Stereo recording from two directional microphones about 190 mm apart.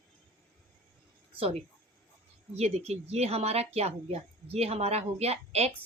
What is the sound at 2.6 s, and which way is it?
A woman's voice, 35° right (ahead or behind).